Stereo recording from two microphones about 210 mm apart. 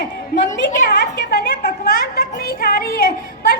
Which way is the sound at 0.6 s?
50° left (ahead or behind).